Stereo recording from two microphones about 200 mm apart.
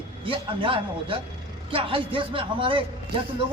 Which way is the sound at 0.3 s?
25° right (ahead or behind).